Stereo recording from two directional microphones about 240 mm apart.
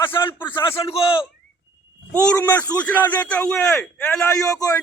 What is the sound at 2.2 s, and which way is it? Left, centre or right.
A man's voice, centre.